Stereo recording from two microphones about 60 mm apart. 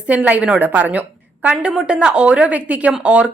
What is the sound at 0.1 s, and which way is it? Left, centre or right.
A woman's voice, right.